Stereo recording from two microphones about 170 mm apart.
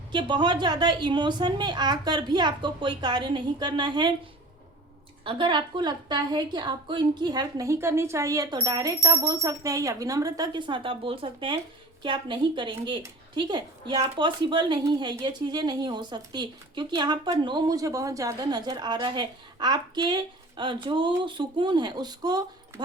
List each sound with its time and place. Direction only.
0.1 s speech: 30° right (ahead or behind)
5.2 s speech: 30° right (ahead or behind)